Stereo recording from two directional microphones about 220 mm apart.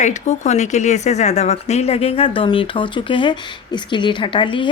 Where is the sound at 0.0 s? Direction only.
30° left (ahead or behind).